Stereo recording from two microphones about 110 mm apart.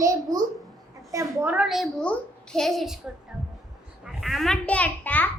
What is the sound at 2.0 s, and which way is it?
A child's voice, 5° left (ahead or behind).